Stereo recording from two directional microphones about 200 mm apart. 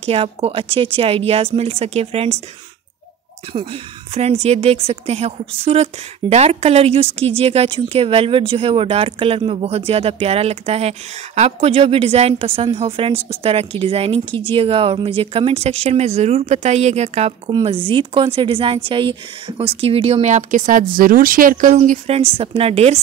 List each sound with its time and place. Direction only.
0.0 s a woman's voice: 30° right (ahead or behind)
3.5 s a woman's voice: 30° right (ahead or behind)